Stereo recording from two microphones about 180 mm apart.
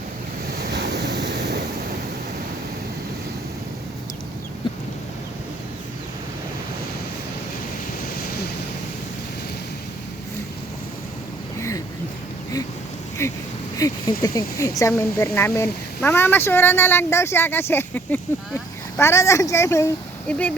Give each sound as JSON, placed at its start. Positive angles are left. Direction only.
{"t": 0.6, "sound": "waves", "side_deg": -65}
{"t": 13.7, "sound": "speech", "side_deg": 20}